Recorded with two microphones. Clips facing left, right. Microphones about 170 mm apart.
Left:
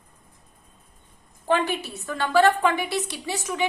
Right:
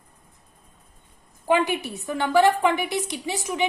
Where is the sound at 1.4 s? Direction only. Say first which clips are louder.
Right 2 dB; 15° right (ahead or behind).